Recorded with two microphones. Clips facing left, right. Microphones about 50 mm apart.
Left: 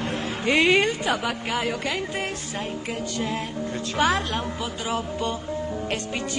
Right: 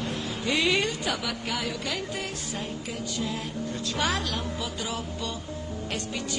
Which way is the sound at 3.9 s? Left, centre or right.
Left.